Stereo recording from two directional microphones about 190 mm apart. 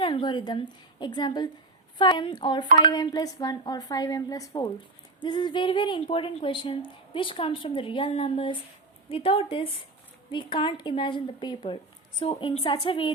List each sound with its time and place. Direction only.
0.0 s a woman's voice: 25° left (ahead or behind)